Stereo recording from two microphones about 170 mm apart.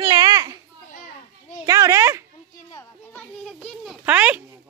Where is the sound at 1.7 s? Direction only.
20° right (ahead or behind).